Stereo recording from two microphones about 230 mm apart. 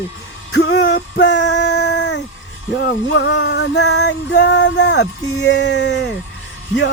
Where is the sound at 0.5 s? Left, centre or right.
Left.